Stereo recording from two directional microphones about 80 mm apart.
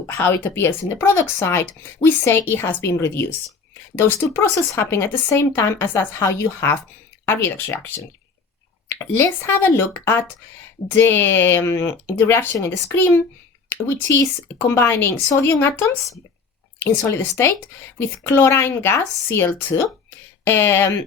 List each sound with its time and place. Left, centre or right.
0.1 s speech: left